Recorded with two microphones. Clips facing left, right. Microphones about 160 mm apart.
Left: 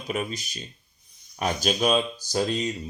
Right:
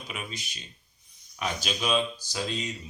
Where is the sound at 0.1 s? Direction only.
40° left (ahead or behind).